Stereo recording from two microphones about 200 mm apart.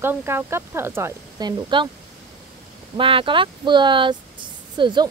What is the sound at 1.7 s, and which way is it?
Speech, 25° right (ahead or behind).